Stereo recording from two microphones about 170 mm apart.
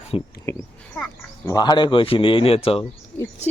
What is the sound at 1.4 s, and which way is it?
Speech, 25° left (ahead or behind).